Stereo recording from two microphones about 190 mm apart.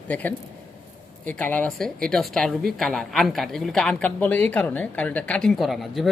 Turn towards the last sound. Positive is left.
turn(degrees=0)  # may be behind; listen again after turning